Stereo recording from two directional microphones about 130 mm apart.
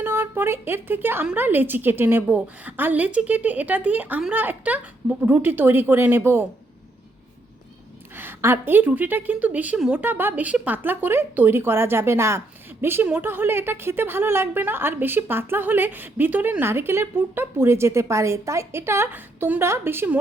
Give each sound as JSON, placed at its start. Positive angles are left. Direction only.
{"t": 0.0, "sound": "a woman's voice", "side_deg": -15}
{"t": 8.1, "sound": "a woman's voice", "side_deg": -15}